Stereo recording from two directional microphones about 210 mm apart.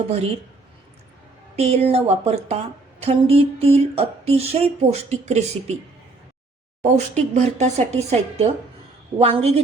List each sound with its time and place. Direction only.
1.5 s a woman's voice: 30° right (ahead or behind)
6.8 s a woman's voice: 35° right (ahead or behind)